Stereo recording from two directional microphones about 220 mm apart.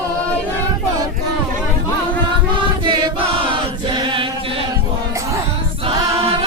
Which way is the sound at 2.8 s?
20° right (ahead or behind).